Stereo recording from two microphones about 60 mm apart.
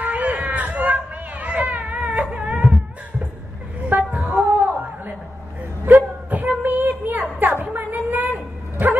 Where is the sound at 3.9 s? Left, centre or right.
Right.